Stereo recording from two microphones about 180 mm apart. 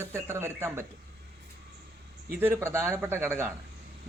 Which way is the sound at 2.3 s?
10° right (ahead or behind).